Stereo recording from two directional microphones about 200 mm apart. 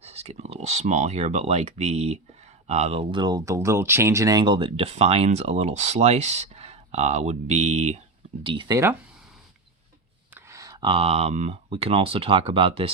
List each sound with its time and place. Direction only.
0.0 s speech: 30° right (ahead or behind)
8.4 s speech: 20° right (ahead or behind)
10.3 s speech: 15° right (ahead or behind)